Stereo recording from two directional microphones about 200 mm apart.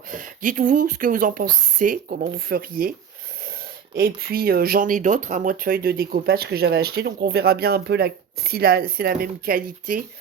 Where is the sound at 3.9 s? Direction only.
50° right (ahead or behind).